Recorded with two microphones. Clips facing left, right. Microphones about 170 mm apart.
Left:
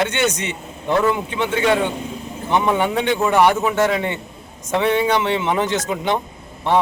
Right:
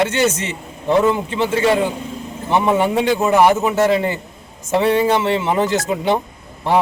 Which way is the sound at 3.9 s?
35° right (ahead or behind).